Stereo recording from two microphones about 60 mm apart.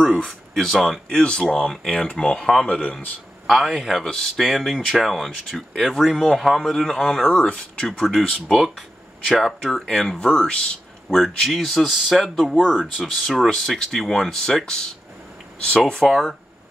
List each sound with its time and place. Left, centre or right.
0.6 s speech: centre
1.0 s speech: centre
3.4 s speech: centre
7.8 s a man's voice: centre
16.0 s speech: centre